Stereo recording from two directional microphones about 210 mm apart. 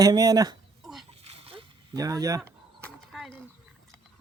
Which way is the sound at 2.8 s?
Centre (ahead or behind).